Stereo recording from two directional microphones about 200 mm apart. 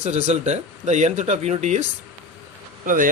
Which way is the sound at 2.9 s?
45° right (ahead or behind).